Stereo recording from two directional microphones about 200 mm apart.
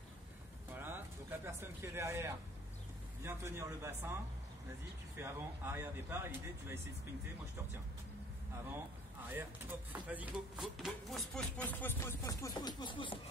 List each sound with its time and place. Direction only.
0.7 s a sound: 10° right (ahead or behind)
3.2 s speech: 15° right (ahead or behind)
9.3 s speech: 10° right (ahead or behind); by 13.2 s 25° left (ahead or behind)